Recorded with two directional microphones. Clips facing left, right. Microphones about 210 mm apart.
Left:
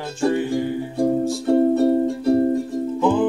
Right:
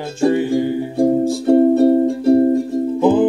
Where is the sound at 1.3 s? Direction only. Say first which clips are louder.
Right 5 dB; 20° right (ahead or behind).